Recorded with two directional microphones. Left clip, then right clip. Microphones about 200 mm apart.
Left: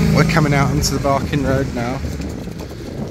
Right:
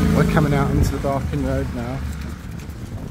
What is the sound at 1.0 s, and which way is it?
Speech, 25° left (ahead or behind).